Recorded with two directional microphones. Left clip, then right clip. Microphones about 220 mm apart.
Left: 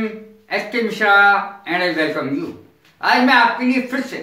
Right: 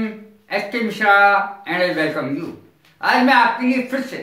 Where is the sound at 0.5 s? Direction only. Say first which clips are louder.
Left 1 dB; 10° right (ahead or behind).